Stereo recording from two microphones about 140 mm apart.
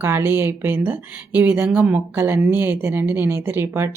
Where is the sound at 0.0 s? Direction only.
15° right (ahead or behind).